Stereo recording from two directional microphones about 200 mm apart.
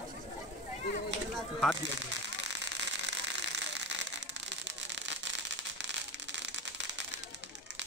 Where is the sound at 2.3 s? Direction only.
60° right (ahead or behind).